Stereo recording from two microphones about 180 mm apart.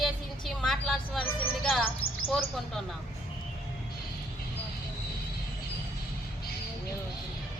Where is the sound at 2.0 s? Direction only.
30° left (ahead or behind).